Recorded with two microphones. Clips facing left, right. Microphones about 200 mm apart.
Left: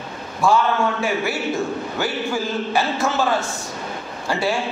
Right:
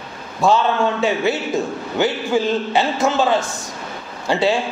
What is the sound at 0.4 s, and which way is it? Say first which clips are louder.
Speech: right 2 dB; 20° right (ahead or behind).